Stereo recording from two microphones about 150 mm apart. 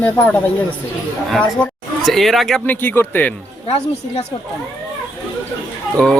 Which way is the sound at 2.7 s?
15° left (ahead or behind).